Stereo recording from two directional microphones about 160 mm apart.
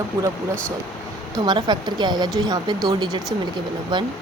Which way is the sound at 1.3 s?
25° right (ahead or behind).